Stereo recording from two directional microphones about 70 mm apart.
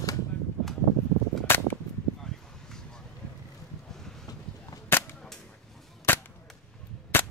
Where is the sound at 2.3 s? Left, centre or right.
Centre.